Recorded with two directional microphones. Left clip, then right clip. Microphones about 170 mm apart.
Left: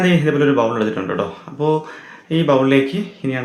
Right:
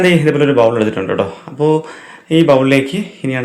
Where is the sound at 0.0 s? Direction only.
15° right (ahead or behind).